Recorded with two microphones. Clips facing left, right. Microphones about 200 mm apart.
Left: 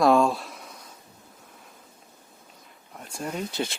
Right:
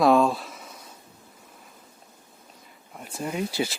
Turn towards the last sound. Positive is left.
turn(degrees=-10)  # may be behind; listen again after turning